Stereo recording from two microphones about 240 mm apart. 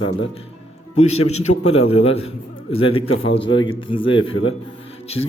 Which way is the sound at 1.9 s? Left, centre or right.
Left.